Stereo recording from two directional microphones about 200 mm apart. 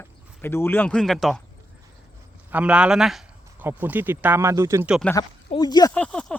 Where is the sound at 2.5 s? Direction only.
5° right (ahead or behind).